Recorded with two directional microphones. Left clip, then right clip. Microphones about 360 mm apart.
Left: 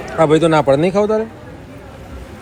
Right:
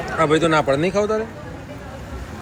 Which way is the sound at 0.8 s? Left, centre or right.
Left.